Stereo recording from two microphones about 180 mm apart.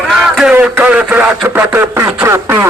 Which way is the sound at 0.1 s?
5° right (ahead or behind).